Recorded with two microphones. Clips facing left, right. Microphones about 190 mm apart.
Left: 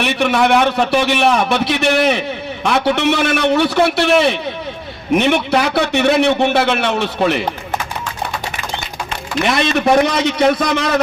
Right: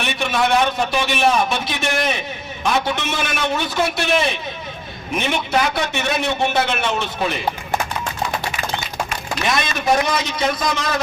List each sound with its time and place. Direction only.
0.0 s a man's voice: 65° left (ahead or behind)
9.4 s a man's voice: 65° left (ahead or behind)